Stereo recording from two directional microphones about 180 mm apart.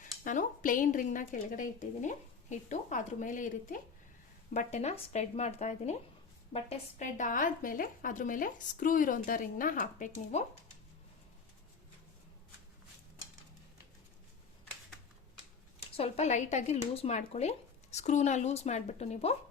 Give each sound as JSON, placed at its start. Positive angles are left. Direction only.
{"t": 0.0, "sound": "a woman's voice", "side_deg": 45}
{"t": 16.0, "sound": "a woman's voice", "side_deg": 35}